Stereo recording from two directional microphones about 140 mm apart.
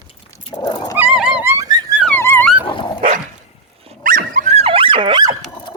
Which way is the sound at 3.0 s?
75° right (ahead or behind).